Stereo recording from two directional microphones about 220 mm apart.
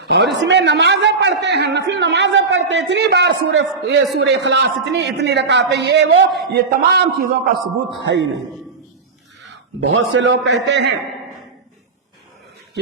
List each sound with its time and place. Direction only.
0.0 s a man's voice: 50° right (ahead or behind)
10.2 s a man's voice: 55° right (ahead or behind)